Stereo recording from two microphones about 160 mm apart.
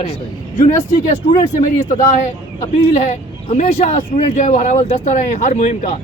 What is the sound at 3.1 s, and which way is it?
Speech, 45° left (ahead or behind).